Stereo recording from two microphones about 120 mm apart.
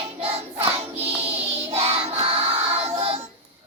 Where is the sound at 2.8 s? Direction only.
60° right (ahead or behind).